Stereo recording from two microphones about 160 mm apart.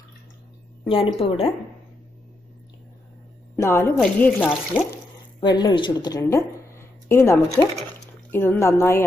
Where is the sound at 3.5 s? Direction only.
15° left (ahead or behind).